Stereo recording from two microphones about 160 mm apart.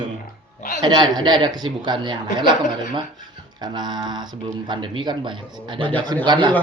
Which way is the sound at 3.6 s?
25° right (ahead or behind).